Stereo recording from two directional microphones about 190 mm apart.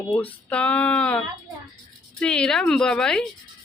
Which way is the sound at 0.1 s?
5° left (ahead or behind).